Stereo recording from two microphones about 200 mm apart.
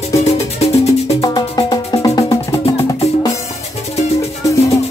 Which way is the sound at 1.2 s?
15° left (ahead or behind).